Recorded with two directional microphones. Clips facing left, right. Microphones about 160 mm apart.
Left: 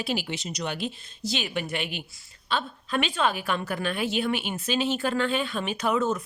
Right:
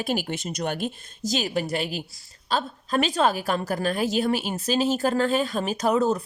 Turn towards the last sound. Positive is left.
turn(degrees=-35)  # may be behind; listen again after turning